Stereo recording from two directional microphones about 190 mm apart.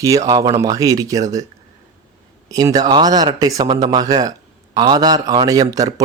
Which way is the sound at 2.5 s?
20° right (ahead or behind).